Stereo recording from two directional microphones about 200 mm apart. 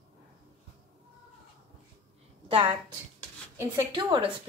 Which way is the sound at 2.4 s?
25° right (ahead or behind).